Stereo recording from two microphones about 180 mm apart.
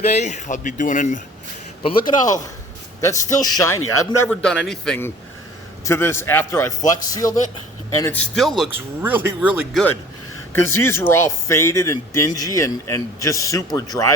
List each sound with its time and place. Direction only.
0.0 s speech: 40° left (ahead or behind)
1.8 s a man's voice: 30° left (ahead or behind)
3.0 s a man's voice: 15° left (ahead or behind)
4.3 s a man's voice: 5° left (ahead or behind)
5.8 s a man's voice: 15° left (ahead or behind)
8.4 s a man's voice: centre (ahead or behind)
8.7 s speech: 10° right (ahead or behind)
10.5 s a man's voice: 15° left (ahead or behind)